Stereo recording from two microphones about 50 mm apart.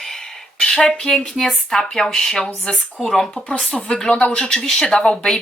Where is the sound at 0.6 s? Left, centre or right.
Centre.